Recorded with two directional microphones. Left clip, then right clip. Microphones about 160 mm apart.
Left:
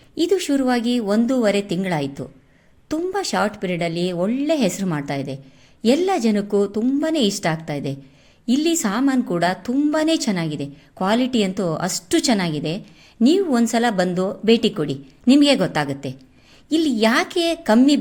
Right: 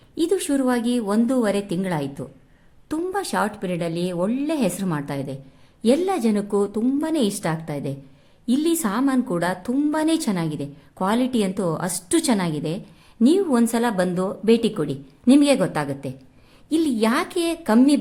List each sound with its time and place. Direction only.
0.2 s a woman's voice: 10° left (ahead or behind)